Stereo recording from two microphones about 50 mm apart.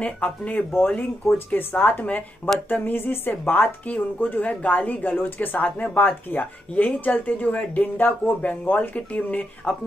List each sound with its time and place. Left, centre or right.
0.0 s a woman's voice: left